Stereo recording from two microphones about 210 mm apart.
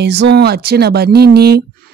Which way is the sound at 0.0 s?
55° right (ahead or behind).